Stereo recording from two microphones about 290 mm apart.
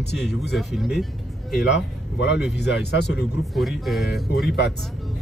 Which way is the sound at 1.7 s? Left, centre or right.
Left.